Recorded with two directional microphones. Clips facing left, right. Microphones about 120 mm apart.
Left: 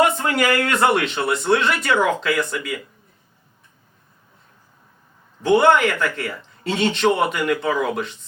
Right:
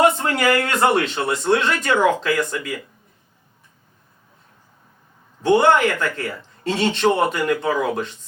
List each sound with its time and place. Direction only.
0.0 s speech: 30° right (ahead or behind)
5.5 s speech: 35° right (ahead or behind)